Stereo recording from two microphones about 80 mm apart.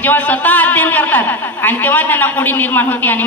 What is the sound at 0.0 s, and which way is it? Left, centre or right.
A woman's voice, left.